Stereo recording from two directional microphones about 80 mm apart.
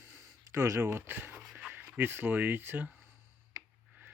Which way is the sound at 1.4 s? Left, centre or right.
Centre.